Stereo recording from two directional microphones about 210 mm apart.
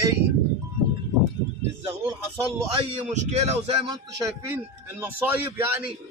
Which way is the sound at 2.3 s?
20° right (ahead or behind).